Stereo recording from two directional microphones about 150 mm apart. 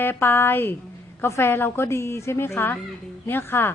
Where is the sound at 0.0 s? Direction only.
15° left (ahead or behind).